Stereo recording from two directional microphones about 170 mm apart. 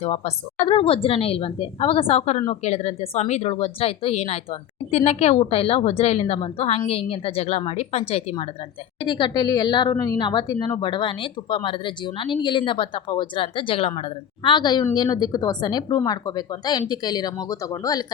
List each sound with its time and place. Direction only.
0.0 s a woman's voice: 40° left (ahead or behind); by 18.0 s 20° left (ahead or behind)